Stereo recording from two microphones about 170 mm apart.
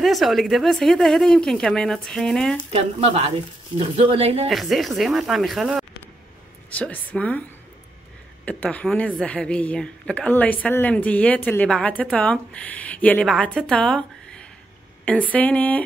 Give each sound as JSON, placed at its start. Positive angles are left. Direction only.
{"t": 0.0, "sound": "speech", "side_deg": 0}
{"t": 2.7, "sound": "speech", "side_deg": -35}
{"t": 4.5, "sound": "speech", "side_deg": 0}
{"t": 6.7, "sound": "a woman's voice", "side_deg": 10}
{"t": 8.5, "sound": "a woman's voice", "side_deg": 10}